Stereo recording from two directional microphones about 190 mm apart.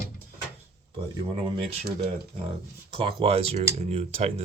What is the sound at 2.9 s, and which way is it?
Speech, 25° right (ahead or behind).